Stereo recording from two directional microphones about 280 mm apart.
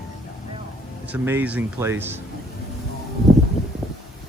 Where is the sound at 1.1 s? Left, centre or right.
Centre.